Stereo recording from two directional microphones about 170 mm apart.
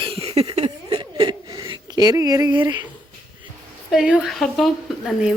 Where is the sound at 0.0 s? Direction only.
35° right (ahead or behind).